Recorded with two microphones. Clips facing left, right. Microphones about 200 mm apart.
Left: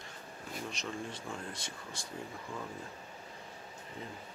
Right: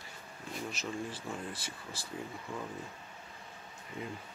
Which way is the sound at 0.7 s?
5° right (ahead or behind).